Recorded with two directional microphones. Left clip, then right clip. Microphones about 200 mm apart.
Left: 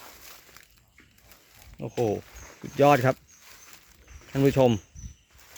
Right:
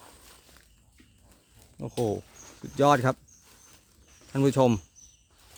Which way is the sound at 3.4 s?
50° left (ahead or behind).